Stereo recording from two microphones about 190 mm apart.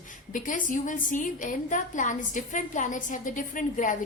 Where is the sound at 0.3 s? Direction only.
45° left (ahead or behind).